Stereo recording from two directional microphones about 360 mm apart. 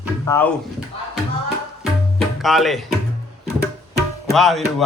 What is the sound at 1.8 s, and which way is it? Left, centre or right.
Tabla, centre.